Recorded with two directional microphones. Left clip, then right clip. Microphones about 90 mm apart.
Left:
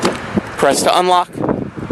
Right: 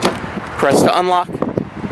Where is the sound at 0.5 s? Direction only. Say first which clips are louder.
Even; 10° left (ahead or behind).